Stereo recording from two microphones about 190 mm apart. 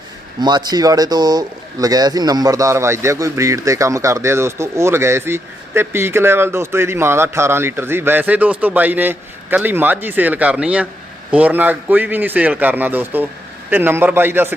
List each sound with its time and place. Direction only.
0.4 s speech: 20° right (ahead or behind)